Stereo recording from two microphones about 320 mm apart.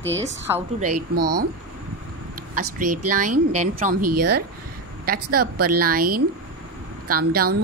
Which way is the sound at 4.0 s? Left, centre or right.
Right.